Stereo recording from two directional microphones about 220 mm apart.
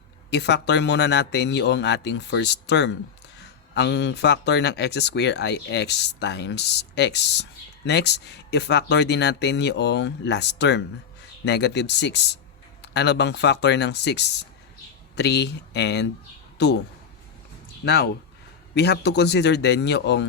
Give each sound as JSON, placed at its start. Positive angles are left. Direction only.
{"t": 0.3, "sound": "speech", "side_deg": 50}
{"t": 17.8, "sound": "speech", "side_deg": 45}